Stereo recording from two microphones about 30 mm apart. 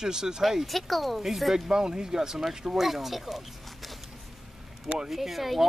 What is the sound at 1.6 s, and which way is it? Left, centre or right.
Speech, right.